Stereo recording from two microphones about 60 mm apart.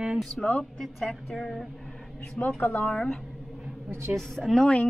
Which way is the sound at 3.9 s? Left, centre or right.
Right.